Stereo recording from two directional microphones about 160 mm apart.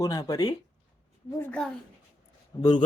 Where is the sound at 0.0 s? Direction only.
20° left (ahead or behind).